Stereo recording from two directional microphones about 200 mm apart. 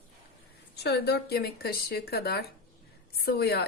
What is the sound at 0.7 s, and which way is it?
Speech, 55° left (ahead or behind).